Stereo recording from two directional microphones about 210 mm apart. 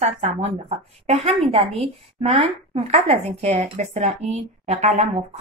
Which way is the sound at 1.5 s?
30° right (ahead or behind).